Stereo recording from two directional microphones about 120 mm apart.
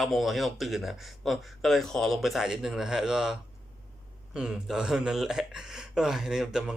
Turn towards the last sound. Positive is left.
turn(degrees=-5)  # may be behind; listen again after turning